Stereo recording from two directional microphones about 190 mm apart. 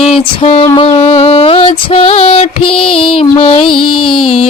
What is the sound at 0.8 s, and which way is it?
Music, 30° left (ahead or behind).